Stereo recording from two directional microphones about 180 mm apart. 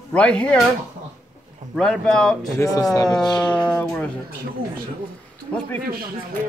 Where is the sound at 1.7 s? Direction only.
5° left (ahead or behind).